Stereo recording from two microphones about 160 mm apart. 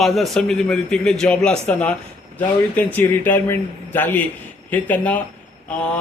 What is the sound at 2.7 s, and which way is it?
A man's voice, 10° left (ahead or behind).